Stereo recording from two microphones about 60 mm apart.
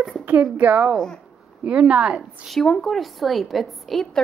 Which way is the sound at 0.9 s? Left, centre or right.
Centre.